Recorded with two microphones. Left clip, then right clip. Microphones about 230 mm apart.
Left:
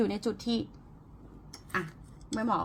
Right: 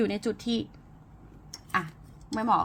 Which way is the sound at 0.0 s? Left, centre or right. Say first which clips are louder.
Right 2 dB; right.